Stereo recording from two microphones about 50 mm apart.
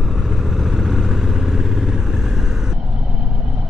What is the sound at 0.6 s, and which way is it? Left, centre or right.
Vehicle, centre.